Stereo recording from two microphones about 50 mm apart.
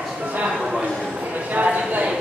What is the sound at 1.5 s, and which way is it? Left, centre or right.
Clip-clop, right.